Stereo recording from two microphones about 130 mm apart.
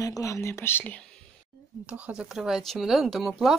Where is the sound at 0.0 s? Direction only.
25° left (ahead or behind).